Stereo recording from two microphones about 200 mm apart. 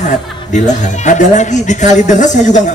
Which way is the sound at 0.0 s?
35° left (ahead or behind).